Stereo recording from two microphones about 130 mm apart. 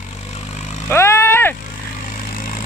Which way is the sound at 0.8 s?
20° left (ahead or behind).